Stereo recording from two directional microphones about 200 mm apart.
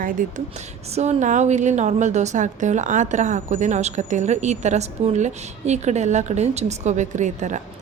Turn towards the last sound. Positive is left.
turn(degrees=-35)  # may be behind; listen again after turning